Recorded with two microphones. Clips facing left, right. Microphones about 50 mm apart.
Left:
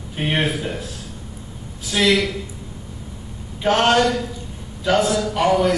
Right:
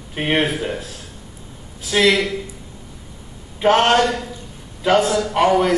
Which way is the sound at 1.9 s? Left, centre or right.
Right.